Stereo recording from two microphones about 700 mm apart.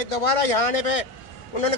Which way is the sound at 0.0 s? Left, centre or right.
Left.